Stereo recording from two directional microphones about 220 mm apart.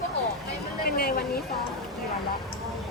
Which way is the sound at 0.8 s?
45° left (ahead or behind).